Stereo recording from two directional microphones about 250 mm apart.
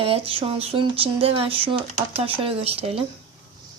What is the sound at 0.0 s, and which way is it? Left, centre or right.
Speech, right.